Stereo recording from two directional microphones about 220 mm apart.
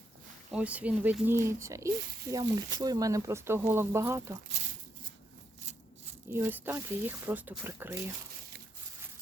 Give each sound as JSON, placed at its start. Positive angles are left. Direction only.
{"t": 0.5, "sound": "speech", "side_deg": -5}
{"t": 4.6, "sound": "a sound", "side_deg": -30}
{"t": 6.3, "sound": "speech", "side_deg": -10}